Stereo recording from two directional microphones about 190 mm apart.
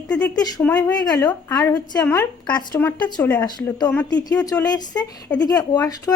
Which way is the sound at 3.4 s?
20° left (ahead or behind).